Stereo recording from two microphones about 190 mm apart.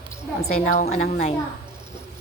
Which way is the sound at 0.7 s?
40° left (ahead or behind).